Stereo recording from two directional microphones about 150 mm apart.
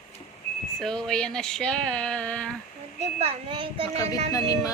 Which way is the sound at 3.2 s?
40° right (ahead or behind).